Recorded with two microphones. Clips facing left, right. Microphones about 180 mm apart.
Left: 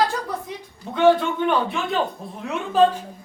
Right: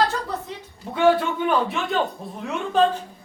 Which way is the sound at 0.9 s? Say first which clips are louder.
Left 2 dB; 5° right (ahead or behind).